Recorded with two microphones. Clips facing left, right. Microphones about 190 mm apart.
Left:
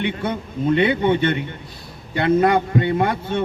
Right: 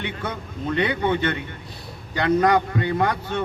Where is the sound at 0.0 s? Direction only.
25° left (ahead or behind).